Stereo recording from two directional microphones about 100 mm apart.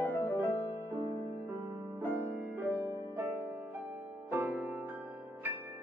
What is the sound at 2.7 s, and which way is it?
Music, 25° right (ahead or behind).